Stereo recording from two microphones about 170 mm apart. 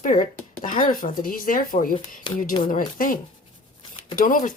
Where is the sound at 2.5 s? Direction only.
30° left (ahead or behind).